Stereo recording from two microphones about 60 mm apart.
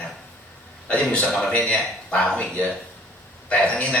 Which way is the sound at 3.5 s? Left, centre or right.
Left.